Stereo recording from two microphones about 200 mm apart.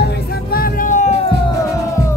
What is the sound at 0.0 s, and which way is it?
Music, 50° left (ahead or behind).